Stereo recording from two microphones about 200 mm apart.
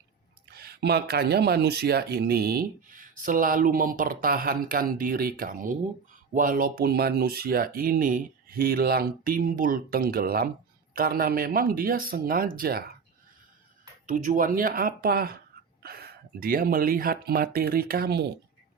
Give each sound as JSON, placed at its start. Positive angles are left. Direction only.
{"t": 0.5, "sound": "speech", "side_deg": -50}
{"t": 14.1, "sound": "speech", "side_deg": -40}